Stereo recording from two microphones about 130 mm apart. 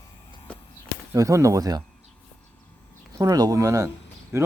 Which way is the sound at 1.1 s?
25° right (ahead or behind).